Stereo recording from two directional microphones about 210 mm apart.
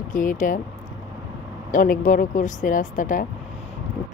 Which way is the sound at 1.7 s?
40° left (ahead or behind).